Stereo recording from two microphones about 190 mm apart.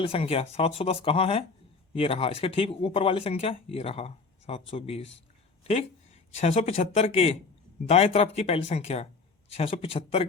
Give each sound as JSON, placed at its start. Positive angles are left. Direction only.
{"t": 0.0, "sound": "speech", "side_deg": 30}
{"t": 6.4, "sound": "speech", "side_deg": 35}